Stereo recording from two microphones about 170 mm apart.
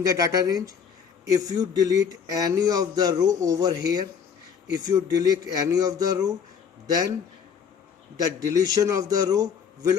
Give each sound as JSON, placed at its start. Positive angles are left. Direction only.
{"t": 0.0, "sound": "speech", "side_deg": -20}
{"t": 8.4, "sound": "speech", "side_deg": -20}